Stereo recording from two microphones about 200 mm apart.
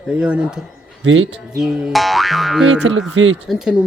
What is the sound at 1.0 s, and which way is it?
Speech, 75° right (ahead or behind).